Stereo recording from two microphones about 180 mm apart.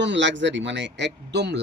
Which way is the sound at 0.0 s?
85° right.